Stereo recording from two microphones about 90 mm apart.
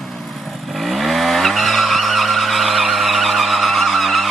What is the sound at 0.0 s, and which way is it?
Vehicle, centre (ahead or behind).